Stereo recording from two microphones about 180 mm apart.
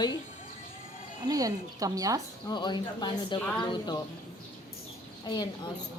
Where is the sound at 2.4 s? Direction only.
25° left (ahead or behind).